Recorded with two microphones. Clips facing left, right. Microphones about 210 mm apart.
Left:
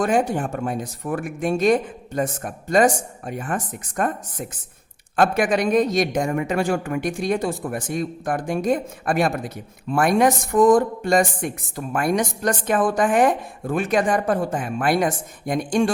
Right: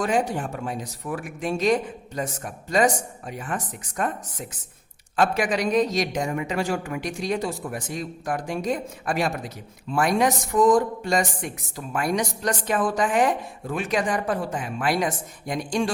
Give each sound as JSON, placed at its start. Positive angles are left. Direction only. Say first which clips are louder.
{"t": 0.0, "sound": "speech", "louder": "left 4 dB", "side_deg": 50}